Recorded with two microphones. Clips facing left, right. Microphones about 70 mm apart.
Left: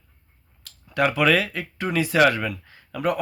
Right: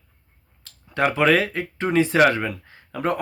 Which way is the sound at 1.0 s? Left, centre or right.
Right.